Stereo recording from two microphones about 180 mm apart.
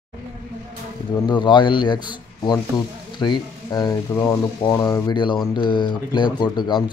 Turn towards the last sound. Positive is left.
turn(degrees=25)  # may be behind; listen again after turning